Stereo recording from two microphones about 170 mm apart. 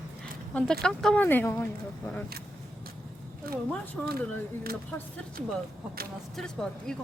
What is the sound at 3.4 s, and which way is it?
Speech, 60° right (ahead or behind).